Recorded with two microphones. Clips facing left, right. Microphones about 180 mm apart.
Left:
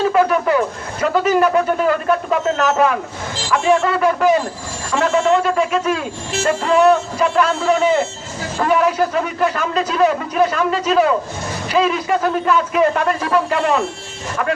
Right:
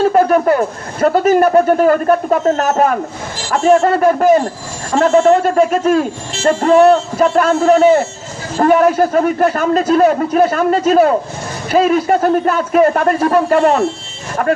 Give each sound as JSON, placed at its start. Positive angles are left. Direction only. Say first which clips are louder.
{"t": 0.1, "sound": "speech", "louder": "right 4 dB", "side_deg": -45}